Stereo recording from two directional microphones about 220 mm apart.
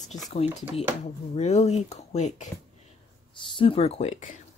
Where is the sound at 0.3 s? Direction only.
30° left (ahead or behind).